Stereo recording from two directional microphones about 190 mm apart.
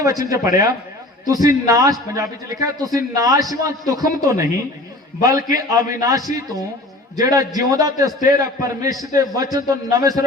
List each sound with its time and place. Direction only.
0.0 s a man's voice: 20° right (ahead or behind)